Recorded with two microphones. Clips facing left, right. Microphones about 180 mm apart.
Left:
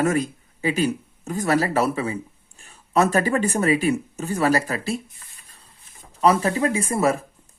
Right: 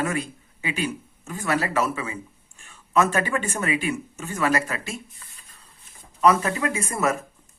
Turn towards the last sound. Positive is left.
turn(degrees=30)  # may be behind; listen again after turning